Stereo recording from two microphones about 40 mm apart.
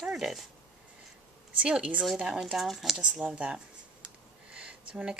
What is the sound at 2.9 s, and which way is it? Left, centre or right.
Speech, centre.